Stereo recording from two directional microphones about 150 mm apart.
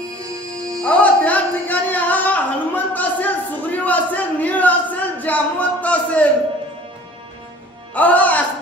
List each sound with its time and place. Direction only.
0.1 s music: 25° right (ahead or behind)
0.8 s music: 10° left (ahead or behind)
7.9 s music: 10° left (ahead or behind)